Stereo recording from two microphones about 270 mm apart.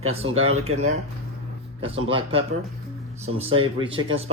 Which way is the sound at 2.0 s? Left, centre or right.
Right.